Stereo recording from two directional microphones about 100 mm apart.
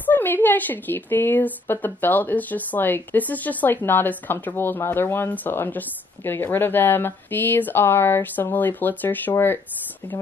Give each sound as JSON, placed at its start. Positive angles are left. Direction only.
{"t": 0.0, "sound": "a woman's voice", "side_deg": 20}